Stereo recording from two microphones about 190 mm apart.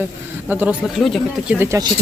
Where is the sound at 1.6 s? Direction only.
15° right (ahead or behind).